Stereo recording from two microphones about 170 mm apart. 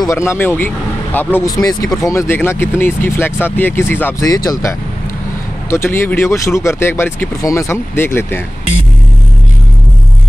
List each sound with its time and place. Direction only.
0.0 s speech: 15° left (ahead or behind)